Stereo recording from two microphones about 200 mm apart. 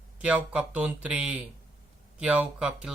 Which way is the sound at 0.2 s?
5° right (ahead or behind).